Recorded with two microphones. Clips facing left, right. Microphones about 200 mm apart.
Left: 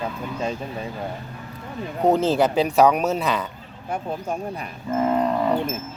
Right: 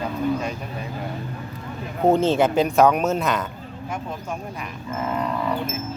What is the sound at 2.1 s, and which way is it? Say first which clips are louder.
Speech: right 1 dB; centre (ahead or behind).